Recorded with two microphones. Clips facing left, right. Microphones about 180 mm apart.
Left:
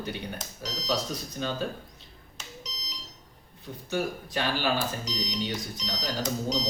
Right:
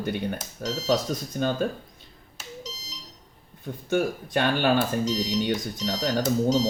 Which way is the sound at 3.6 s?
50° right (ahead or behind).